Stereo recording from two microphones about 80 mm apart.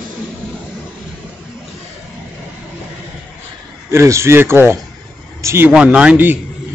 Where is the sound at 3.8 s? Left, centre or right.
Right.